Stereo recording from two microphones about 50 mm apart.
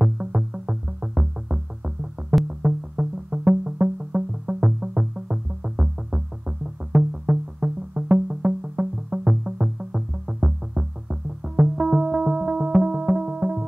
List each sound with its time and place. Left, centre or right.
0.0 s music: right